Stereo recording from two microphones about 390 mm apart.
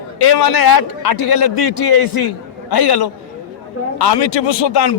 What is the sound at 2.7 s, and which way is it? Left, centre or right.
Speech, left.